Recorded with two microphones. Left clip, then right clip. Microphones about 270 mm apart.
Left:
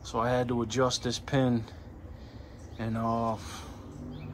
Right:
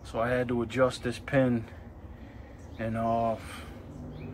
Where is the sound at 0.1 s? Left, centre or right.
Centre.